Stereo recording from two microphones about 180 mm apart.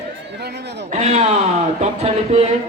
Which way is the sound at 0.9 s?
40° right (ahead or behind).